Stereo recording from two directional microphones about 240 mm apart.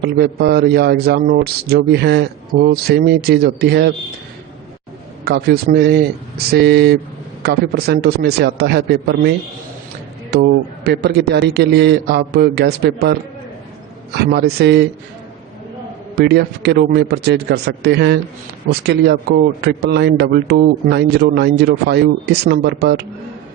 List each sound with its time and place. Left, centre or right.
0.0 s speech: right
5.2 s a man's voice: right
10.3 s a man's voice: right
16.1 s a man's voice: right